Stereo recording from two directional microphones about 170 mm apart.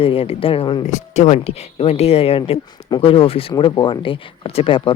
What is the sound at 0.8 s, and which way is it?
Speech, 45° left (ahead or behind).